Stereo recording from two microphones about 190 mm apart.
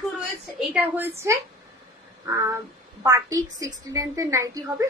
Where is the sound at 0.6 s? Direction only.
10° right (ahead or behind).